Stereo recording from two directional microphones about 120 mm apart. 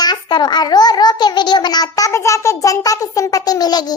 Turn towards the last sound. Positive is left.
turn(degrees=35)  # may be behind; listen again after turning